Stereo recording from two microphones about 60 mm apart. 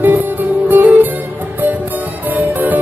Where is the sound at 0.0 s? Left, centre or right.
Right.